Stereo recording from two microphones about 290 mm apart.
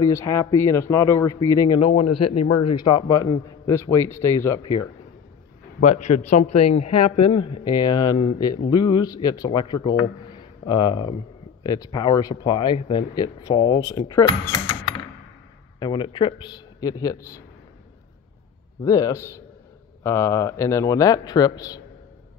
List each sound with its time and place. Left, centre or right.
0.0 s speech: centre
2.0 s a man's voice: left
2.7 s speech: centre
5.9 s a man's voice: left
7.1 s speech: centre
15.8 s speech: centre
18.9 s speech: centre